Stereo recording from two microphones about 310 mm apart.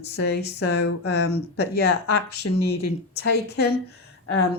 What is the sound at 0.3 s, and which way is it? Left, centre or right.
Speech, left.